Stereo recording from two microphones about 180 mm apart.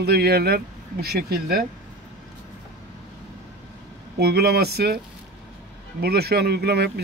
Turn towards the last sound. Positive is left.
turn(degrees=-65)  # may be behind; listen again after turning